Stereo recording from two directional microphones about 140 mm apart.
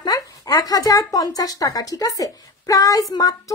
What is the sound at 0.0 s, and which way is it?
Speech, 25° left (ahead or behind).